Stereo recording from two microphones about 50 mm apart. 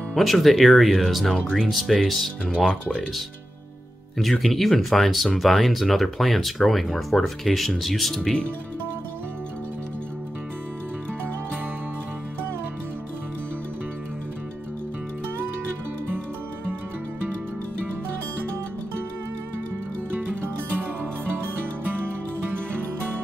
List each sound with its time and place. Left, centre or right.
0.1 s speech: centre
2.5 s speech: centre
4.2 s speech: centre
20.4 s music: right